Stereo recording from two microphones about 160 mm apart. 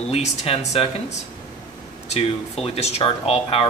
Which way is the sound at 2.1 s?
40° left (ahead or behind).